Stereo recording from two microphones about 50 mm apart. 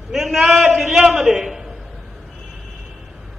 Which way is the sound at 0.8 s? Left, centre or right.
Centre.